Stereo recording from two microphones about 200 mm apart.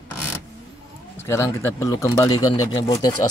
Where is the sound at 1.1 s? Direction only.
15° left (ahead or behind).